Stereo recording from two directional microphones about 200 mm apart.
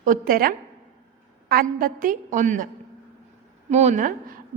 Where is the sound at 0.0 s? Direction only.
45° right (ahead or behind).